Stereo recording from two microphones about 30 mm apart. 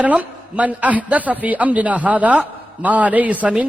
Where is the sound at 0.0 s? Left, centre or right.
Right.